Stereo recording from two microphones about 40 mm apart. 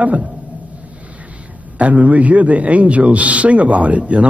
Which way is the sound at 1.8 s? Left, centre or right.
Right.